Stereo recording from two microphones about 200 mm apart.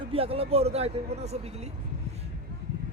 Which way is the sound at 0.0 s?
30° right (ahead or behind).